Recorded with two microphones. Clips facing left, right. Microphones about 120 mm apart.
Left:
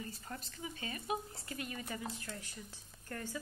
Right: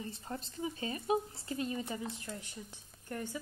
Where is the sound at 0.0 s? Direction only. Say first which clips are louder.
Right 4 dB; 25° right (ahead or behind).